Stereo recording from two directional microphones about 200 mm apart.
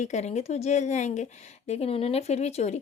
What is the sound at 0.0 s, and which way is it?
Speech, 35° left (ahead or behind).